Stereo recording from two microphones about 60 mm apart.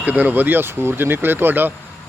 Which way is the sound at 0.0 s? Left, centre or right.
Right.